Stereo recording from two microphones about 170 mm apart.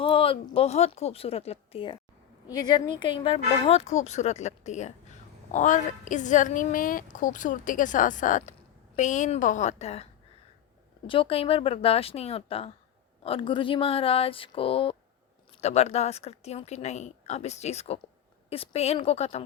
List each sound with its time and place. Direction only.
0.0 s speech: 35° left (ahead or behind)
2.5 s a woman's voice: 25° left (ahead or behind)